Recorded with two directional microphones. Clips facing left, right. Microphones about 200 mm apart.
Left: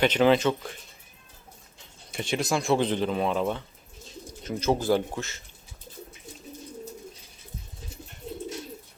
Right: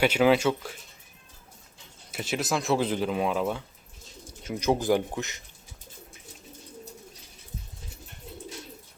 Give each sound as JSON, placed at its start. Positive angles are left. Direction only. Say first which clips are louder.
{"t": 0.0, "sound": "speech", "louder": "left 1 dB", "side_deg": -10}
{"t": 2.0, "sound": "speech", "louder": "left 2 dB", "side_deg": -5}